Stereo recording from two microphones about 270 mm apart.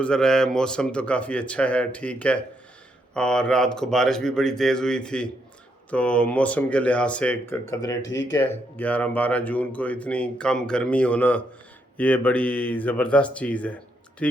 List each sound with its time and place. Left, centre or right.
0.0 s speech: centre
8.0 s speech: left
8.4 s speech: centre